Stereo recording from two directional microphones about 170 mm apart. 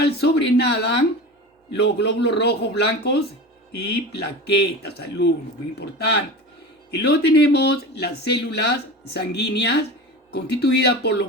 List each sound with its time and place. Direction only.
0.0 s speech: 85° left